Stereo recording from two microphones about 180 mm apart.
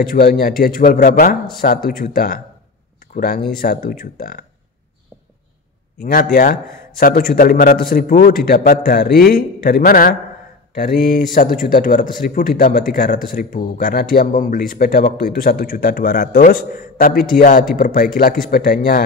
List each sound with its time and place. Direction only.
0.0 s speech: 55° left (ahead or behind)
5.9 s speech: 50° left (ahead or behind)